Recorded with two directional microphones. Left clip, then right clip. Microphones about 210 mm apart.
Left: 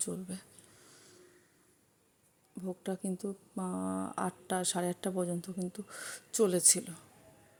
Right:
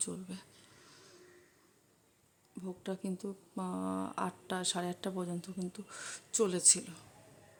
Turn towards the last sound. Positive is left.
turn(degrees=15)  # may be behind; listen again after turning